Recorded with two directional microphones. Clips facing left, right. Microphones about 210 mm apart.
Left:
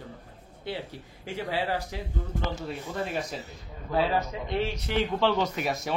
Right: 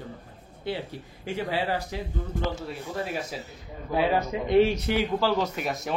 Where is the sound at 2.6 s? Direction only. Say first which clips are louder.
Even; 5° right (ahead or behind).